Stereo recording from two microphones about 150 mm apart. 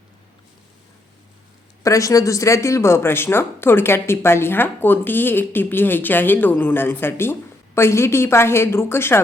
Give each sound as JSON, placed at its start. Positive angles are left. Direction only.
{"t": 1.8, "sound": "speech", "side_deg": 20}